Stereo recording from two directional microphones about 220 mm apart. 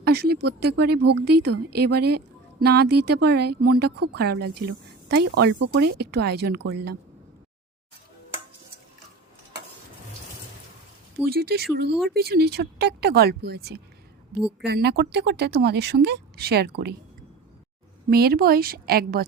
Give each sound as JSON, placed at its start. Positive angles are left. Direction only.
{"t": 0.0, "sound": "a woman's voice", "side_deg": -45}
{"t": 11.3, "sound": "speech", "side_deg": -45}
{"t": 18.1, "sound": "speech", "side_deg": -45}